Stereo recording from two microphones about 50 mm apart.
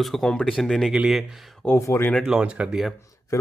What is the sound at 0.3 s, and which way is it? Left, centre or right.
Speech, centre.